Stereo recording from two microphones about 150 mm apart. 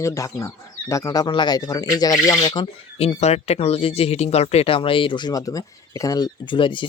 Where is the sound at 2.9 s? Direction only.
45° left (ahead or behind).